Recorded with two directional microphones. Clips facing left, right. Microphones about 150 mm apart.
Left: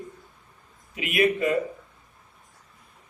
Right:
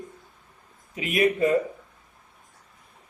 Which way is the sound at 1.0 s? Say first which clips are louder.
Right 1 dB; 35° right (ahead or behind).